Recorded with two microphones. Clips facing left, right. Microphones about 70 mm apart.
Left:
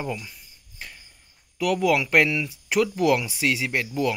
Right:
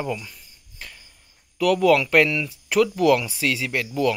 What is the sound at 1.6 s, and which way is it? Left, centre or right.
Speech, centre.